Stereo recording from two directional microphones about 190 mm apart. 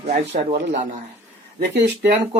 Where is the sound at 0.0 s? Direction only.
35° right (ahead or behind).